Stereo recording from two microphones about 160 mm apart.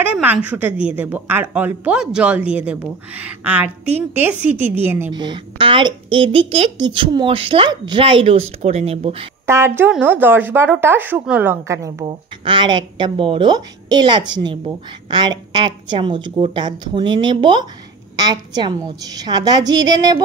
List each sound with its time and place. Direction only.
0.0 s a woman's voice: 10° right (ahead or behind)
5.1 s a woman's voice: 30° right (ahead or behind)
9.5 s a woman's voice: 15° right (ahead or behind)
12.1 s speech: 30° right (ahead or behind)